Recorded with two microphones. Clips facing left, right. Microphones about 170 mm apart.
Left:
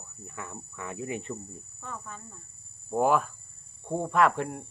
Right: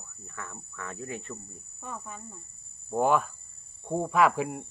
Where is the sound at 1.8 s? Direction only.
15° right (ahead or behind).